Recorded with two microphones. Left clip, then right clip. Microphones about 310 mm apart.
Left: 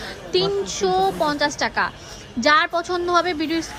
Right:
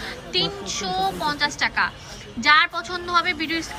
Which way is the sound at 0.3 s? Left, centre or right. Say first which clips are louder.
Left 4 dB; left.